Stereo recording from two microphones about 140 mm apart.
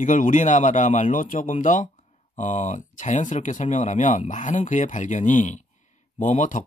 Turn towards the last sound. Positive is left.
turn(degrees=60)  # may be behind; listen again after turning